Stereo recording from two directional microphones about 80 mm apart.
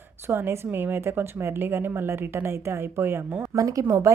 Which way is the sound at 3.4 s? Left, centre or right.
Right.